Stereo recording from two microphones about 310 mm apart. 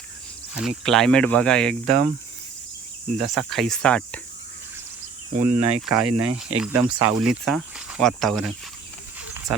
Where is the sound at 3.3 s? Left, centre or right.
Centre.